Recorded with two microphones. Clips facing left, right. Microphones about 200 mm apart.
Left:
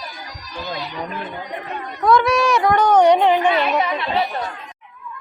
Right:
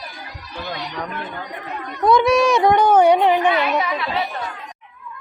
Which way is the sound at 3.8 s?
25° left (ahead or behind).